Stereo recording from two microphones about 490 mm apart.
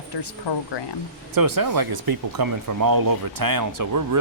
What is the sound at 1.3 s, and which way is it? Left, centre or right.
Speech, right.